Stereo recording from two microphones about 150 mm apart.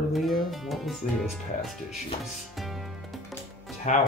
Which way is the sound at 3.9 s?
55° left (ahead or behind).